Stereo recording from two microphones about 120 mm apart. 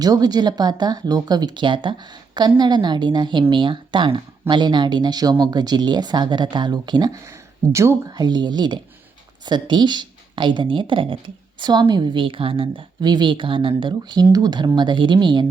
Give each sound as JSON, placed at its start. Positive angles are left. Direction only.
{"t": 0.0, "sound": "speech", "side_deg": -30}
{"t": 7.7, "sound": "a woman's voice", "side_deg": -25}